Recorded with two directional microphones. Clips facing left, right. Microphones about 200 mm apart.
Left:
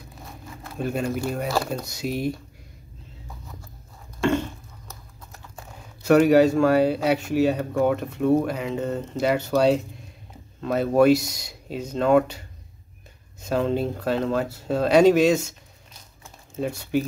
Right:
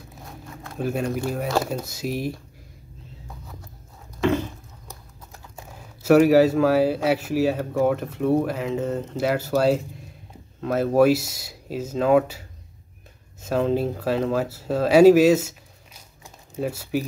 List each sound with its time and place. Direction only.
0.2 s speech: centre (ahead or behind)
4.2 s a sound: centre (ahead or behind)
5.6 s speech: 5° right (ahead or behind)